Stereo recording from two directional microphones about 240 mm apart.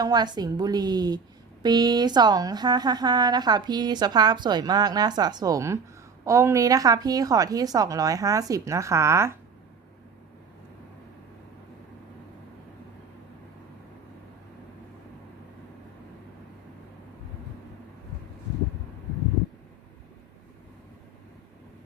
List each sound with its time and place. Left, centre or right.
0.0 s a woman's voice: centre